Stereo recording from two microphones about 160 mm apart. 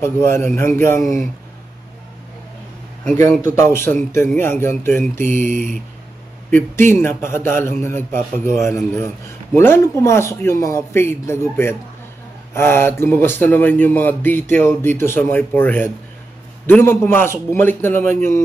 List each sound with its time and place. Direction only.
0.0 s a man's voice: 15° left (ahead or behind)
3.2 s a man's voice: 15° left (ahead or behind)
5.1 s speech: 50° right (ahead or behind)
6.5 s a man's voice: 15° left (ahead or behind)